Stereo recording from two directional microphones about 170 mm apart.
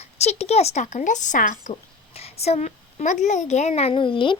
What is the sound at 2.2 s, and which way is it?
A woman's voice, 35° left (ahead or behind).